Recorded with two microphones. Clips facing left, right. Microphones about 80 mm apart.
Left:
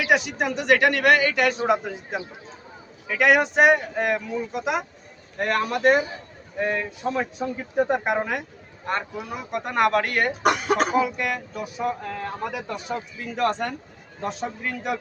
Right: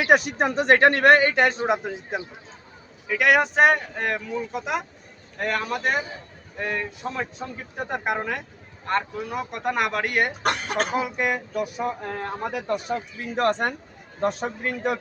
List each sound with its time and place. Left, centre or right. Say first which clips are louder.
0.0 s a man's voice: right 2 dB; right
3.1 s a man's voice: left 1 dB; centre
9.3 s speech: right 1 dB; centre
10.4 s a man's voice: left 4 dB; centre
10.9 s a man's voice: left 2 dB; right